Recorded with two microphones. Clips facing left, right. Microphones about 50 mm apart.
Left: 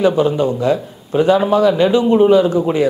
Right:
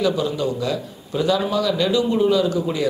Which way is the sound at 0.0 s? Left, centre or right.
Left.